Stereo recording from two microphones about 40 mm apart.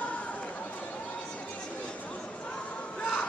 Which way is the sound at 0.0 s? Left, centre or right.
Left.